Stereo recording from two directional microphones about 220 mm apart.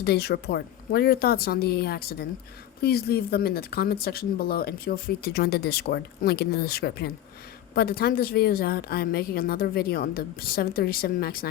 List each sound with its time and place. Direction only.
0.0 s speech: 45° left (ahead or behind)